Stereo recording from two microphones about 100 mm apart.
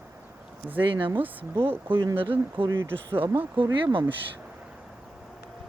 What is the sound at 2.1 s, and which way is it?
Speech, 65° right (ahead or behind).